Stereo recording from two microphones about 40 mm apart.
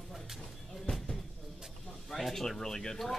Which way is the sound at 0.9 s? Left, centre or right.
Left.